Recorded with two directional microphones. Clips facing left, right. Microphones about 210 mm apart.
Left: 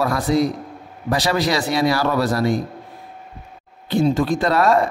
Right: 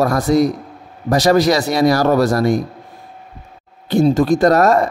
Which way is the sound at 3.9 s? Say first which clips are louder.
Right 5 dB; 45° right (ahead or behind).